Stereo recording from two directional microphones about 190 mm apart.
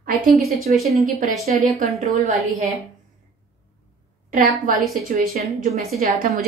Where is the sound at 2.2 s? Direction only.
35° right (ahead or behind).